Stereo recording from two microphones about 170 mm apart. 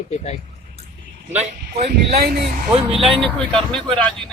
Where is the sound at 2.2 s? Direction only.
65° right (ahead or behind).